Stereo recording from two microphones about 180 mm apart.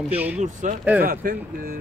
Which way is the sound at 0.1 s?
10° right (ahead or behind).